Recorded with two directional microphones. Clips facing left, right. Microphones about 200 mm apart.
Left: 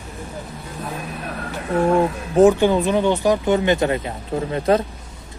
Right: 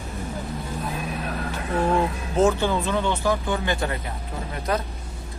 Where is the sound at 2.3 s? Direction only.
15° left (ahead or behind).